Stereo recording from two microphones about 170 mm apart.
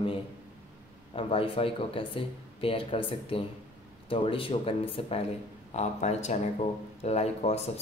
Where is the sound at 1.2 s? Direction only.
35° left (ahead or behind).